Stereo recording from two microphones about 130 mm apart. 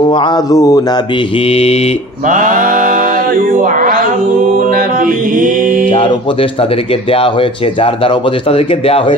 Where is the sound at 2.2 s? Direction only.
90° right.